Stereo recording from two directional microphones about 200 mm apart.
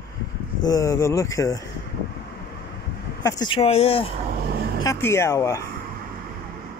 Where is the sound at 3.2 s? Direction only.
25° left (ahead or behind).